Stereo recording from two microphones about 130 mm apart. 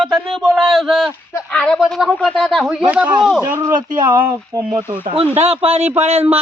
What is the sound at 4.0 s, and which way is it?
Speech, 30° right (ahead or behind).